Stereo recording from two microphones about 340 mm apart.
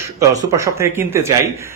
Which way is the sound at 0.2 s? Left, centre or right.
Centre.